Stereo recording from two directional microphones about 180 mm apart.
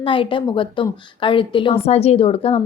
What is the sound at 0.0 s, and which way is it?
A woman's voice, 30° left (ahead or behind).